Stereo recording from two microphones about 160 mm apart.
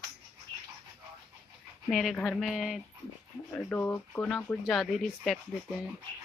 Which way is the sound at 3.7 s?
10° left (ahead or behind).